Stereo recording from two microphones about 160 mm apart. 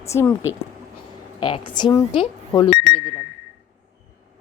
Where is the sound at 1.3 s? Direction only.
30° left (ahead or behind).